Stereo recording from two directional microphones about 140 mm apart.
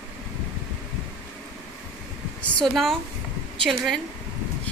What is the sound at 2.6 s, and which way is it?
A woman's voice, centre (ahead or behind).